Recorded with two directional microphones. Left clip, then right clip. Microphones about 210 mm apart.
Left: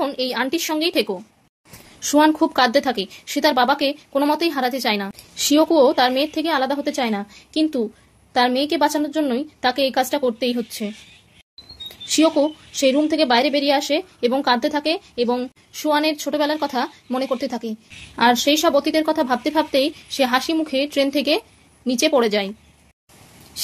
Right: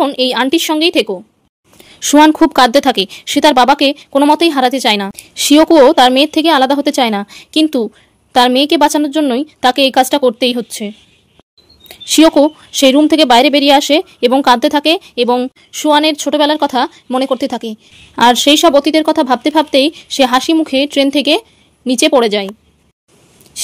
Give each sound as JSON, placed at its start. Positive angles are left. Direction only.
{"t": 0.0, "sound": "a woman's voice", "side_deg": -50}
{"t": 2.0, "sound": "a woman's voice", "side_deg": -50}
{"t": 11.9, "sound": "a woman's voice", "side_deg": -55}